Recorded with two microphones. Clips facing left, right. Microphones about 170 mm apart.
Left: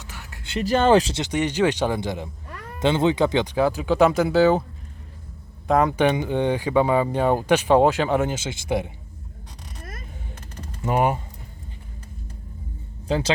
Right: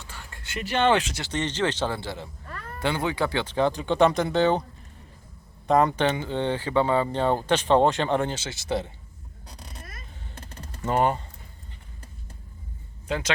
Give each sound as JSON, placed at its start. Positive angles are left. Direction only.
{"t": 0.5, "sound": "speech", "side_deg": 40}
{"t": 1.1, "sound": "speech", "side_deg": 15}
{"t": 5.6, "sound": "speech", "side_deg": 0}
{"t": 6.1, "sound": "speech", "side_deg": 15}
{"t": 10.8, "sound": "speech", "side_deg": 10}
{"t": 13.1, "sound": "speech", "side_deg": 30}